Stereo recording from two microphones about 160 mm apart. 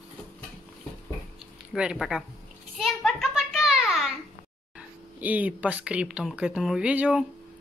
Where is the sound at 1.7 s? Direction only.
5° right (ahead or behind).